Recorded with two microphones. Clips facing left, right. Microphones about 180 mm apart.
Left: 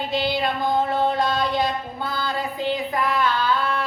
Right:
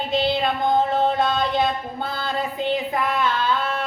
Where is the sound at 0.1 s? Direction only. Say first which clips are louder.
Right 4 dB; 25° right (ahead or behind).